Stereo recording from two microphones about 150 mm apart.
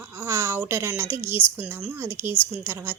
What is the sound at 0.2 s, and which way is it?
A woman's voice, 15° right (ahead or behind).